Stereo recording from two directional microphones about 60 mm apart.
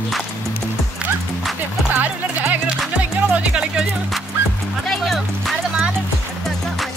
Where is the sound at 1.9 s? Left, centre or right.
Right.